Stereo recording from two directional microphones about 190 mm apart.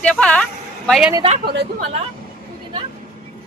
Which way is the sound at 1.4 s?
60° right (ahead or behind).